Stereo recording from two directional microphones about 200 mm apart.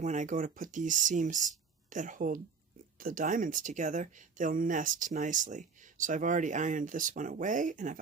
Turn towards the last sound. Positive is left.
turn(degrees=-40)  # may be behind; listen again after turning